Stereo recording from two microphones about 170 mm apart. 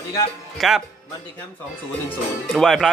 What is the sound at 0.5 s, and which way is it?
Speech, centre (ahead or behind).